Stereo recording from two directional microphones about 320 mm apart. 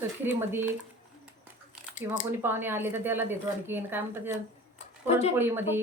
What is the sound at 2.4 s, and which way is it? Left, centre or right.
A woman's voice, centre.